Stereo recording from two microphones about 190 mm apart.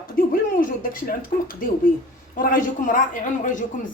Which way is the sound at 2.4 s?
45° left (ahead or behind).